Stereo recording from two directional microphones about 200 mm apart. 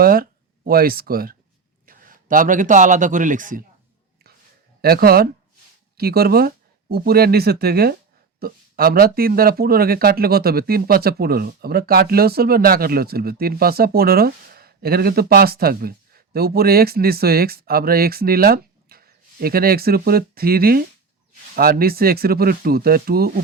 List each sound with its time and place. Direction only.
0.0 s a man's voice: 45° right (ahead or behind)
4.8 s speech: 50° right (ahead or behind)